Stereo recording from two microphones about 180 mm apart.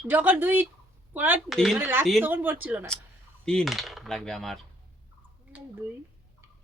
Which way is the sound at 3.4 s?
5° left (ahead or behind).